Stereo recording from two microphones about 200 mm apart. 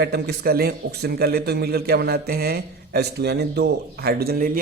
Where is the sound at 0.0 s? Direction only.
55° right (ahead or behind).